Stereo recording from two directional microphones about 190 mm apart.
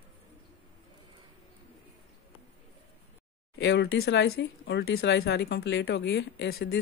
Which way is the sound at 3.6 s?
65° left (ahead or behind).